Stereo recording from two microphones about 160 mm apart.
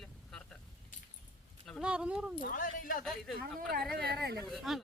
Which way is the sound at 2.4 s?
65° left (ahead or behind).